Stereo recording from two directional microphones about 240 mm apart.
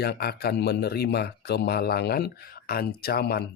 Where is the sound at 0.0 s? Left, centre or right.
Left.